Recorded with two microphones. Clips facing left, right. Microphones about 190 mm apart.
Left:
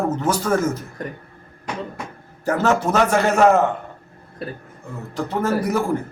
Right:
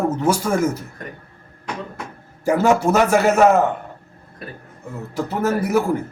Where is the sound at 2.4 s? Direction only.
10° right (ahead or behind).